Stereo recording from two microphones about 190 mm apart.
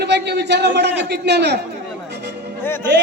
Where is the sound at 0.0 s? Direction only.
65° right (ahead or behind).